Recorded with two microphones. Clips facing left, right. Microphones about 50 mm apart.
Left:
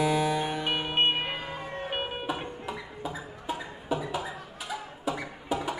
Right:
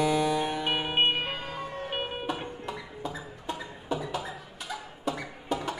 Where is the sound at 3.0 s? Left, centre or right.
Centre.